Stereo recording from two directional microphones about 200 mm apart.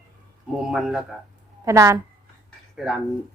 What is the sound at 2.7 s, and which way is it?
Speech, 5° right (ahead or behind).